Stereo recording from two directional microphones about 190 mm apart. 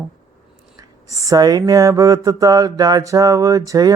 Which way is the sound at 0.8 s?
20° right (ahead or behind).